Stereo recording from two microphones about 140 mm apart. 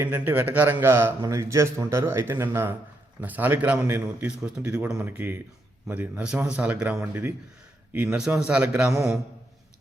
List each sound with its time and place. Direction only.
0.0 s a man's voice: 15° right (ahead or behind)
4.4 s a man's voice: 5° right (ahead or behind)